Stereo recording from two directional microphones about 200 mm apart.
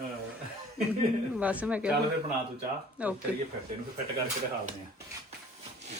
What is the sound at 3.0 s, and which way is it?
Speech, 5° right (ahead or behind).